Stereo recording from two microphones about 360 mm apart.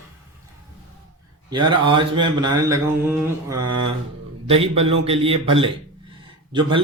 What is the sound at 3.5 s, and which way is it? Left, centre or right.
Speech, right.